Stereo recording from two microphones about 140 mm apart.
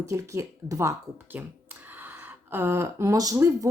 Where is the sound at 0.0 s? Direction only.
20° right (ahead or behind).